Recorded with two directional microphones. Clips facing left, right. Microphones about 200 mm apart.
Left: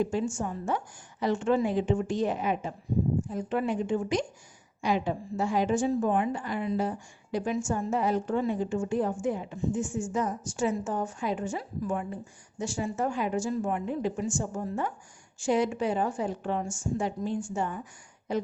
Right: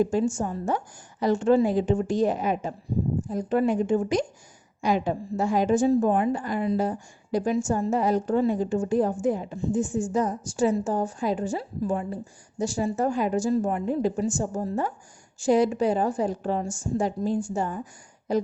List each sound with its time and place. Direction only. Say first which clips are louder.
0.0 s a woman's voice: right 5 dB; 40° right (ahead or behind)